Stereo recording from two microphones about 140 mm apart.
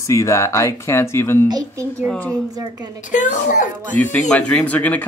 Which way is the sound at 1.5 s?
25° right (ahead or behind).